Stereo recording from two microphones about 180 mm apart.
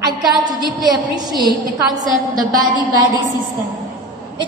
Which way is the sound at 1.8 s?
20° right (ahead or behind).